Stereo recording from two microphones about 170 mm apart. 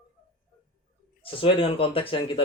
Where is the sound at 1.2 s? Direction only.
30° left (ahead or behind).